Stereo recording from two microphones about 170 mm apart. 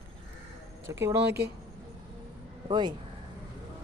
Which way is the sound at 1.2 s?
80° right.